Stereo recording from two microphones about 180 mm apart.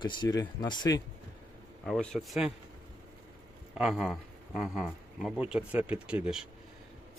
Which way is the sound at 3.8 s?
5° right (ahead or behind).